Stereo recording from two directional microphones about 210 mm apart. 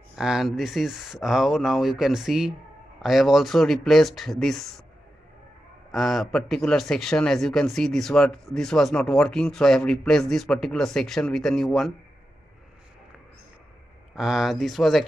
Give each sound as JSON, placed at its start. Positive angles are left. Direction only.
{"t": 0.1, "sound": "speech", "side_deg": 0}
{"t": 5.9, "sound": "speech", "side_deg": 0}
{"t": 14.1, "sound": "speech", "side_deg": 0}